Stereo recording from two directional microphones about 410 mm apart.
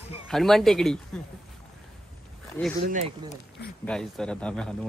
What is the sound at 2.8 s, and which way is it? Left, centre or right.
Speech, centre.